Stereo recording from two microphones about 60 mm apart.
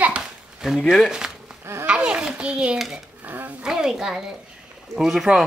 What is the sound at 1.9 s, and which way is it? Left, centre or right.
Speech, centre.